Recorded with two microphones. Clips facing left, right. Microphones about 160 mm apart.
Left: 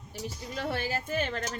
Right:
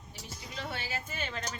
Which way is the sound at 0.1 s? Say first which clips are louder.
Left 8 dB; 45° left (ahead or behind).